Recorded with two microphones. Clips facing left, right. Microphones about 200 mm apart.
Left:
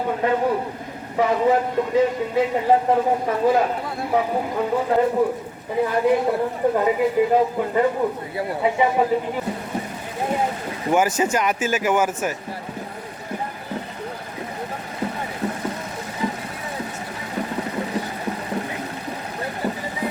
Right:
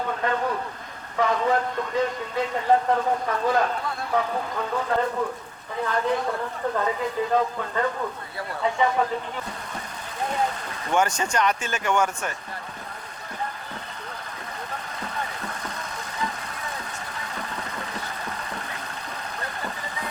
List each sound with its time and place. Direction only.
0.0 s a man's voice: 15° left (ahead or behind)
10.8 s speech: 5° left (ahead or behind)
17.3 s vehicle: 10° left (ahead or behind)